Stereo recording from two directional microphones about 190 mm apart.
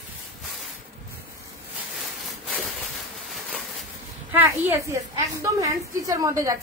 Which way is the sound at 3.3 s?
Centre (ahead or behind).